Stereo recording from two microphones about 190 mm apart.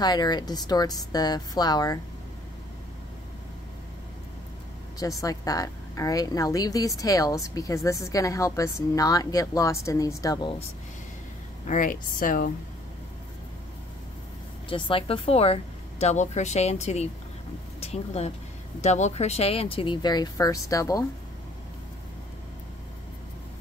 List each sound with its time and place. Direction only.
0.0 s speech: 20° left (ahead or behind)
4.9 s a woman's voice: 20° left (ahead or behind)
11.6 s a woman's voice: 45° left (ahead or behind)
14.7 s a woman's voice: 30° left (ahead or behind)